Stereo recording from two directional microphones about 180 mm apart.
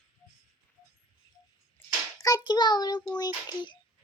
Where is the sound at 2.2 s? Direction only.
20° left (ahead or behind).